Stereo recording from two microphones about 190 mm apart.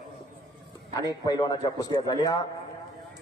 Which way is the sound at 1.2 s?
20° left (ahead or behind).